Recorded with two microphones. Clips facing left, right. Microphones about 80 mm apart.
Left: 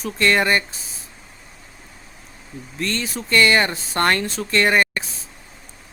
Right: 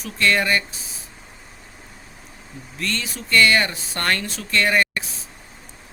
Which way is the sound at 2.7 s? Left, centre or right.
Left.